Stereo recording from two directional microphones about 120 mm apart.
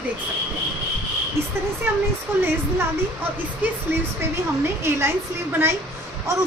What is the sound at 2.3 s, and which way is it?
Speech, 20° right (ahead or behind).